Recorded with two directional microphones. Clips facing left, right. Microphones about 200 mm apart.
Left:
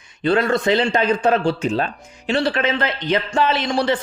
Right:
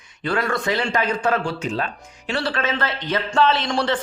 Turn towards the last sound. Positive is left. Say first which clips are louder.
# left 1 dB
turn(degrees=10)  # may be behind; listen again after turning